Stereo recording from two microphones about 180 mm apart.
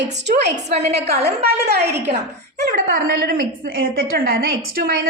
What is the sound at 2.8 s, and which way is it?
A woman's voice, 50° right (ahead or behind).